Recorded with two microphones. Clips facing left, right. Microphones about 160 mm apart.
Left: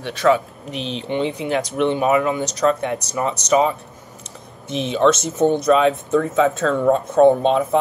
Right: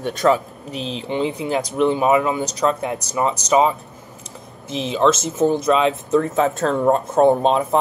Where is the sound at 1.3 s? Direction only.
30° right (ahead or behind).